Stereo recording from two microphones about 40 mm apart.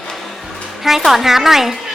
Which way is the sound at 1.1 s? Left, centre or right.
Centre.